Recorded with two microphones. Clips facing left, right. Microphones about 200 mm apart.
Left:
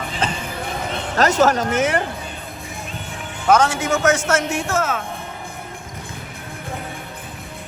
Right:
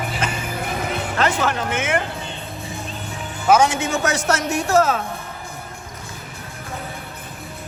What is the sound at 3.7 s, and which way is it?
Speech, 30° right (ahead or behind).